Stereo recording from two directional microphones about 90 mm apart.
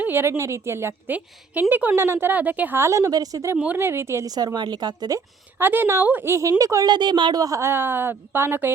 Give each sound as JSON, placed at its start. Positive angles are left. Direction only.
{"t": 0.0, "sound": "a woman's voice", "side_deg": -25}
{"t": 2.0, "sound": "a woman's voice", "side_deg": -30}
{"t": 2.8, "sound": "a woman's voice", "side_deg": -35}
{"t": 3.8, "sound": "a woman's voice", "side_deg": -30}
{"t": 4.3, "sound": "speech", "side_deg": -45}
{"t": 5.5, "sound": "a woman's voice", "side_deg": -25}
{"t": 6.3, "sound": "a woman's voice", "side_deg": -40}
{"t": 6.9, "sound": "a woman's voice", "side_deg": -55}
{"t": 7.6, "sound": "a woman's voice", "side_deg": -25}